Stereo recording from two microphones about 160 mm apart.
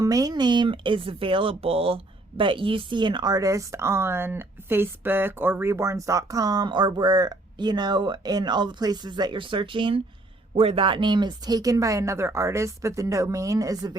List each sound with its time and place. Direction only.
0.0 s speech: 20° right (ahead or behind)